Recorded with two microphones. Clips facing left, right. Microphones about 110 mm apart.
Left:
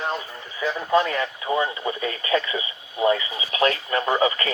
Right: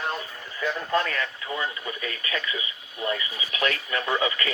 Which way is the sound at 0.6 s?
10° left (ahead or behind).